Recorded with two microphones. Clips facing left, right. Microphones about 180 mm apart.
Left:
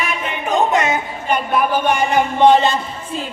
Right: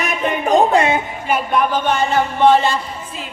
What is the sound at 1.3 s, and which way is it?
Speech, 5° left (ahead or behind).